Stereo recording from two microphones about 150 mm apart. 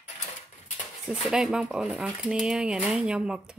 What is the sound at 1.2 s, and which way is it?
Speech, 5° right (ahead or behind).